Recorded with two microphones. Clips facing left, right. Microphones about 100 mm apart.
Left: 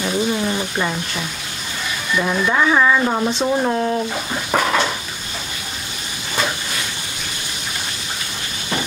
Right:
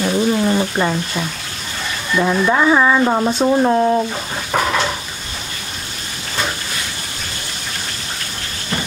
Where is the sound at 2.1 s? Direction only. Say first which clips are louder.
Right 3 dB; 20° right (ahead or behind).